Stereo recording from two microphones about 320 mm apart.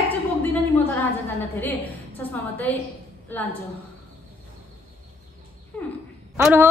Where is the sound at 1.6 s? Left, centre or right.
Centre.